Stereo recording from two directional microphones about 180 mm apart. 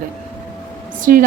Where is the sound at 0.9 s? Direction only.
45° right (ahead or behind).